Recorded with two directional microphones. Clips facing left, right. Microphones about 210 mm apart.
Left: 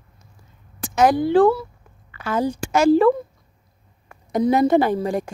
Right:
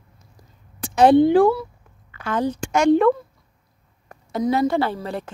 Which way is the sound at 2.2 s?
10° left (ahead or behind).